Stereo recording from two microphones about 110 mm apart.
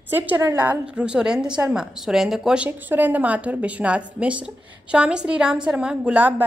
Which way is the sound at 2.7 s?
15° right (ahead or behind).